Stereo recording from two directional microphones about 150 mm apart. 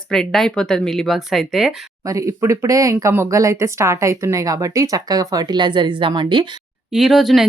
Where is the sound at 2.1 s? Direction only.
20° right (ahead or behind).